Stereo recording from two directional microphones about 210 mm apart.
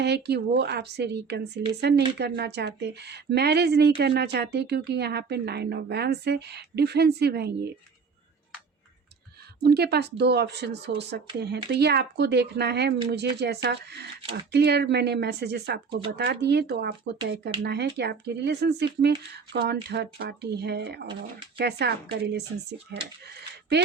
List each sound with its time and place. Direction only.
0.0 s speech: 50° right (ahead or behind)
9.6 s speech: 50° right (ahead or behind)